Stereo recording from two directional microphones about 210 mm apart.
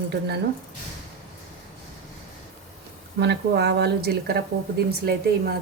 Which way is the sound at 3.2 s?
50° right (ahead or behind).